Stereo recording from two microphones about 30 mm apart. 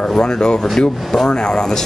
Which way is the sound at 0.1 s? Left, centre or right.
Left.